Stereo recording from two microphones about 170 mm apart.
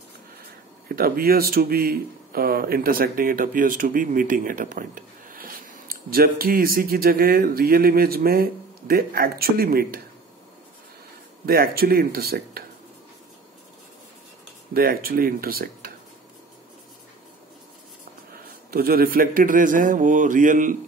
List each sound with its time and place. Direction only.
0.8 s a man's voice: 60° right (ahead or behind)
11.4 s a man's voice: 60° right (ahead or behind)
14.7 s a man's voice: 60° right (ahead or behind)
18.7 s a man's voice: 60° right (ahead or behind)